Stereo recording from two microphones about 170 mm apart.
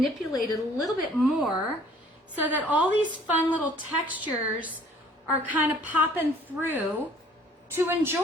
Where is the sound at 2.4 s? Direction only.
10° right (ahead or behind).